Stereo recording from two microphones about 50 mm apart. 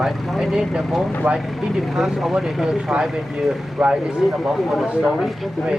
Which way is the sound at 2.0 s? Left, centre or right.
Centre.